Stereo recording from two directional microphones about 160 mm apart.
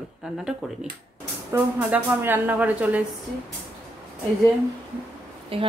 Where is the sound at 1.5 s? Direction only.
10° right (ahead or behind).